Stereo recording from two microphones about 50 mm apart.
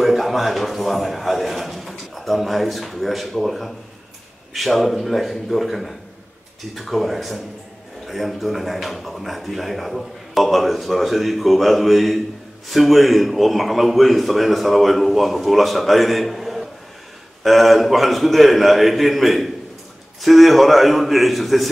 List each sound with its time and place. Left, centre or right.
0.0 s a man's voice: centre